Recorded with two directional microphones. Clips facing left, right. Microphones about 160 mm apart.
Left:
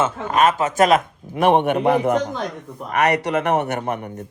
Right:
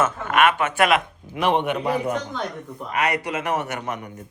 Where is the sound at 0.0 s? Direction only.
30° left (ahead or behind); by 4.1 s 50° left (ahead or behind).